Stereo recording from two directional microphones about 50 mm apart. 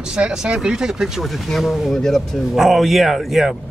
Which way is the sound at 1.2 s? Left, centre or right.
Centre.